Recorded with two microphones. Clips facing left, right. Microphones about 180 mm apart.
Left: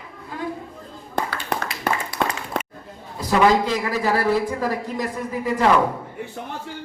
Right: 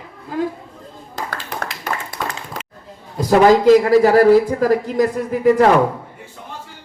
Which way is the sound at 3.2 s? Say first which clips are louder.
Right 7 dB; 45° right (ahead or behind).